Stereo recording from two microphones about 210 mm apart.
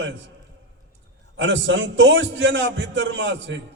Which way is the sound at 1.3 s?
60° right (ahead or behind).